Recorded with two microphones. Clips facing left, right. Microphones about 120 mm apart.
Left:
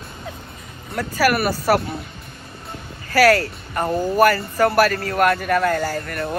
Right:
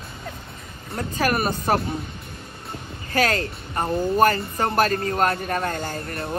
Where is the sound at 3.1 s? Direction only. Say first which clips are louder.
Left 7 dB; 25° right (ahead or behind).